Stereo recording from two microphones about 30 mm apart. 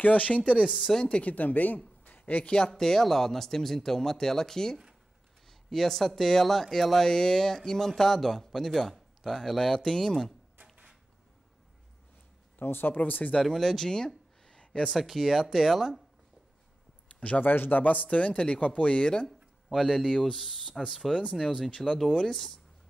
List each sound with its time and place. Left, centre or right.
0.0 s speech: left
0.9 s speech: centre
1.2 s speech: left
2.0 s a sound: left
2.6 s speech: centre
7.9 s speech: centre
9.8 s speech: centre
12.5 s speech: left
13.4 s speech: centre
13.8 s a sound: left
14.6 s a sound: left
15.0 s speech: centre
17.4 s speech: left
19.2 s speech: centre